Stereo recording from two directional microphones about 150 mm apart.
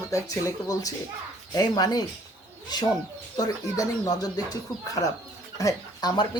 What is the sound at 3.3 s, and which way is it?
Speech, 25° left (ahead or behind).